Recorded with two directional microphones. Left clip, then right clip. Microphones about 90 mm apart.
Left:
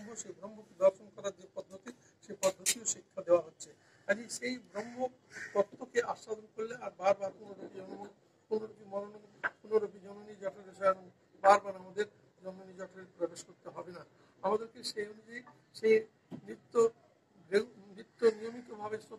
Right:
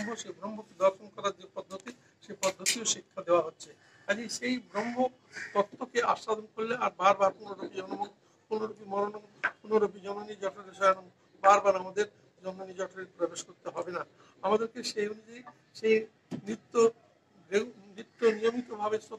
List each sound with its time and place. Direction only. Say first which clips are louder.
0.4 s a man's voice: right 1 dB; 20° right (ahead or behind)
1.6 s a sound: right 4 dB; 30° right (ahead or behind)
2.9 s a man's voice: right 1 dB; 30° right (ahead or behind)
4.0 s a sound: right 2 dB; 35° right (ahead or behind)
4.4 s a man's voice: right 6 dB; 30° right (ahead or behind)
5.9 s speech: right 6 dB; 10° right (ahead or behind)
6.6 s a man's voice: right 7 dB; 30° right (ahead or behind)